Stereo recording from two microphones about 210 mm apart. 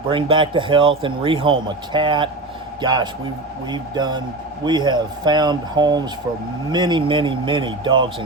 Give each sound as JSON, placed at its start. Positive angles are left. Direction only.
{"t": 0.1, "sound": "speech", "side_deg": -25}